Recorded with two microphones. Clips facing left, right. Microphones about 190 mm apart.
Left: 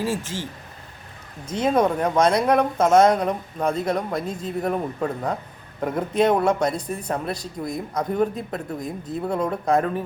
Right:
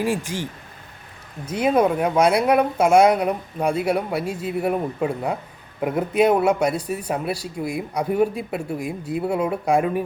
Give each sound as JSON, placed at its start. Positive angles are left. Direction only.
{"t": 0.0, "sound": "a man's voice", "side_deg": -15}
{"t": 1.5, "sound": "a man's voice", "side_deg": -10}